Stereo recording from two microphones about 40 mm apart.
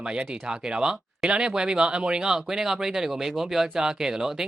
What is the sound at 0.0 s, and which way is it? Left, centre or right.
Speech, right.